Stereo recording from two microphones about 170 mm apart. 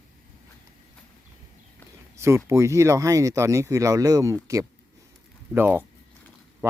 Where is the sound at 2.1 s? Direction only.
15° right (ahead or behind).